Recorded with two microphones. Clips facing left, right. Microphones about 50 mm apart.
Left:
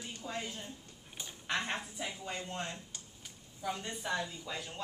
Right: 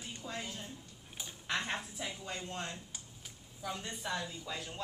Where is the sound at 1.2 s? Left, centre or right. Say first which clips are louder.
Left 1 dB; centre.